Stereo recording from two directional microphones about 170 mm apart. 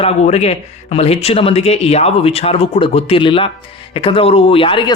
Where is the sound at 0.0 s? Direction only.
40° left (ahead or behind).